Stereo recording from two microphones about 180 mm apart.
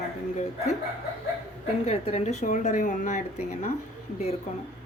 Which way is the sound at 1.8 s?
35° left (ahead or behind).